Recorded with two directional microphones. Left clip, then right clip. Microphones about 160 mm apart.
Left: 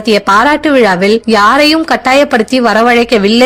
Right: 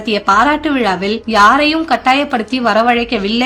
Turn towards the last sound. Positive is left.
turn(degrees=45)  # may be behind; listen again after turning